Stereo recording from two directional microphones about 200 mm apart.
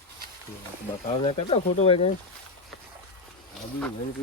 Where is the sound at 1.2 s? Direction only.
30° left (ahead or behind).